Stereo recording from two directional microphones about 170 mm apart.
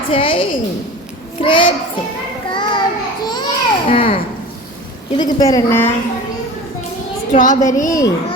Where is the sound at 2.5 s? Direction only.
30° left (ahead or behind).